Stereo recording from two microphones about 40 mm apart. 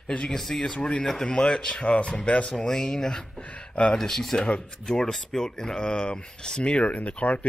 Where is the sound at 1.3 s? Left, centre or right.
Left.